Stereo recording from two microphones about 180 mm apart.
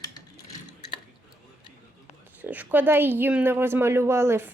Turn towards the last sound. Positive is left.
turn(degrees=-15)  # may be behind; listen again after turning